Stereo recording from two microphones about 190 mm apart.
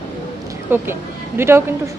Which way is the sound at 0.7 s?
10° right (ahead or behind).